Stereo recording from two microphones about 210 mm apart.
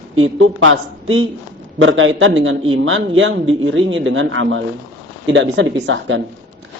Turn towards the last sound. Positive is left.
turn(degrees=-65)  # may be behind; listen again after turning